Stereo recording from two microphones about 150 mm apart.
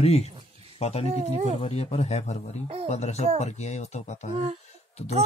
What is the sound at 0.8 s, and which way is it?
Speech, 45° left (ahead or behind).